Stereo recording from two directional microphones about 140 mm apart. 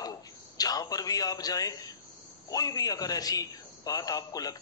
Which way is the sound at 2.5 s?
25° left (ahead or behind).